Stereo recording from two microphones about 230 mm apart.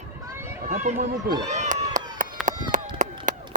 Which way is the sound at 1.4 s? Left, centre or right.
Right.